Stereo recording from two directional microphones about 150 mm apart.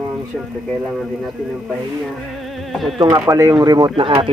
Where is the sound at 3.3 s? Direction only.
20° right (ahead or behind).